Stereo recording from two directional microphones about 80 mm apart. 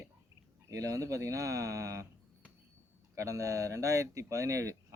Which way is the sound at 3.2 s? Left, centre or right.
Right.